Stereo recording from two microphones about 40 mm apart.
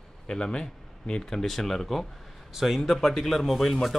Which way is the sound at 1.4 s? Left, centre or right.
Centre.